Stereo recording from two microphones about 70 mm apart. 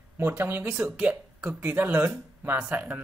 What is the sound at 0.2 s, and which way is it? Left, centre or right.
Speech, right.